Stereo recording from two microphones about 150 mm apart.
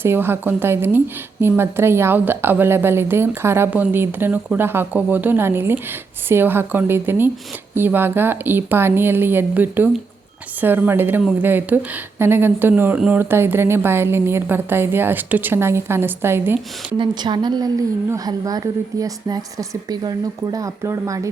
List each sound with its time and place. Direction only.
0.0 s speech: 15° right (ahead or behind)
17.0 s a woman's voice: 30° right (ahead or behind)